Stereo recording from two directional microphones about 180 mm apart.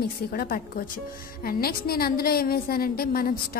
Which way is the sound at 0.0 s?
55° left (ahead or behind).